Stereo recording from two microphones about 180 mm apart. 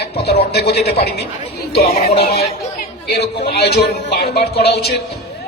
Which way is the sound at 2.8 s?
65° left (ahead or behind).